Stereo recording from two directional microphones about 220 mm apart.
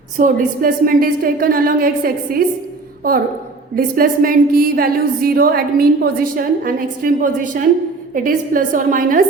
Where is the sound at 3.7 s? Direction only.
40° right (ahead or behind).